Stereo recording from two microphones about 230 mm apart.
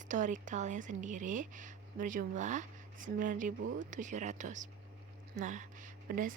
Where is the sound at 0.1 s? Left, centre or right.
Right.